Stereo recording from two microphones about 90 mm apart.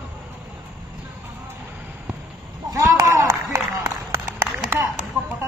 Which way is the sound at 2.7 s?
35° right (ahead or behind).